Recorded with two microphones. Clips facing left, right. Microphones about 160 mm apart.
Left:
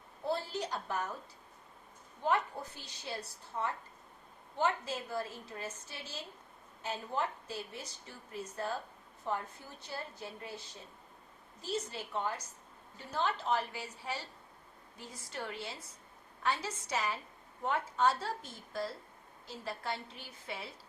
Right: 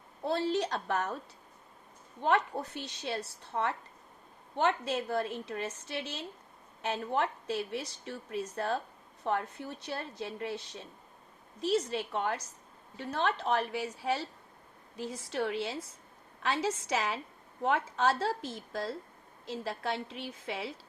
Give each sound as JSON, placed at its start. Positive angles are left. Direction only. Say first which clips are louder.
{"t": 0.3, "sound": "a woman's voice", "louder": "right 6 dB", "side_deg": -75}
{"t": 2.2, "sound": "a woman's voice", "louder": "right 4 dB", "side_deg": -75}
{"t": 11.6, "sound": "a woman's voice", "louder": "right 8 dB", "side_deg": -80}